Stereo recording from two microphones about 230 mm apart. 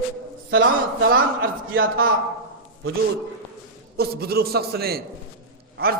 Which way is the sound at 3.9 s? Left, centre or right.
Right.